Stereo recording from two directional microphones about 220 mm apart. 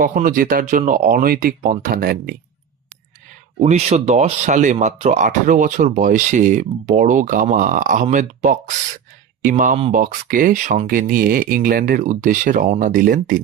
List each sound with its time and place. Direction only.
0.0 s speech: 40° right (ahead or behind)
3.6 s speech: 30° right (ahead or behind)